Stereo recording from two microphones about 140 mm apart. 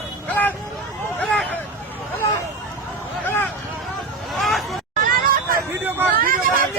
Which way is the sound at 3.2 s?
15° left (ahead or behind).